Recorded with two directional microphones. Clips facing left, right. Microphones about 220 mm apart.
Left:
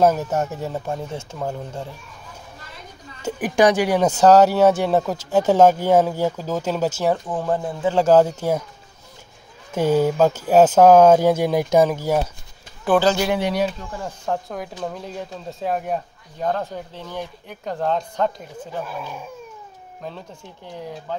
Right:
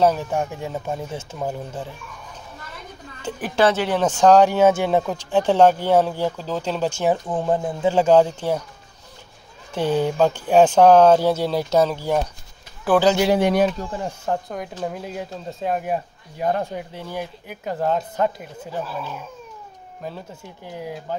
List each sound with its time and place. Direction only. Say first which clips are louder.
0.7 s speech: left 1 dB; centre (ahead or behind)
3.3 s speech: left 2 dB; 15° left (ahead or behind)
7.2 s speech: right 1 dB; 15° right (ahead or behind)
7.9 s speech: left 1 dB; centre (ahead or behind)
9.8 s speech: left 2 dB; 10° left (ahead or behind)
12.8 s speech: even; 5° right (ahead or behind)
13.4 s speech: right 4 dB; 50° right (ahead or behind)
13.8 s speech: right 3 dB; 20° right (ahead or behind)
14.2 s speech: left 2 dB; centre (ahead or behind)
20.0 s speech: right 1 dB; 5° right (ahead or behind)